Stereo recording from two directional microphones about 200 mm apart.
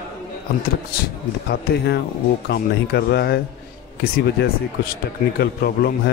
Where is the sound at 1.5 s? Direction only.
55° left (ahead or behind).